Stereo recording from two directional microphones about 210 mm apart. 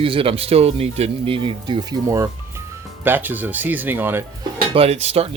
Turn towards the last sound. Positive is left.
turn(degrees=-30)  # may be behind; listen again after turning